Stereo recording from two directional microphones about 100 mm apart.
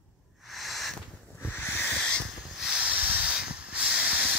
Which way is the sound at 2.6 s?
5° right (ahead or behind).